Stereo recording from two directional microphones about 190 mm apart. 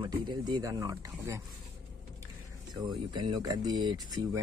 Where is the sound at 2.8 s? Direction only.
25° right (ahead or behind).